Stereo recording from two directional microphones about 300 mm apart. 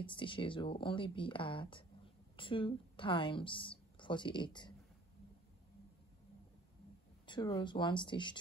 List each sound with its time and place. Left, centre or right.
0.0 s a woman's voice: centre
7.2 s speech: centre